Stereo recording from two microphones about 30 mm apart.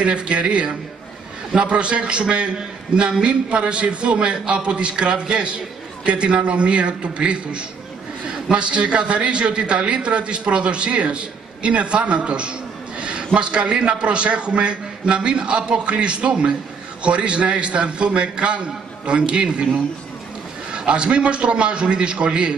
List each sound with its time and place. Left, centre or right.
0.0 s a man's voice: right
1.7 s a man's voice: right
5.1 s a man's voice: right
6.0 s a man's voice: right
20.7 s a man's voice: right